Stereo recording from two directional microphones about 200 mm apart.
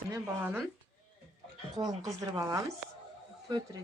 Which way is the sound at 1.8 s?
20° right (ahead or behind).